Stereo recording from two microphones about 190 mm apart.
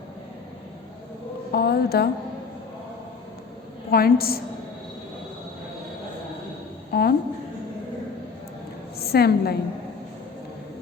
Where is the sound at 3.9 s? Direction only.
55° left (ahead or behind).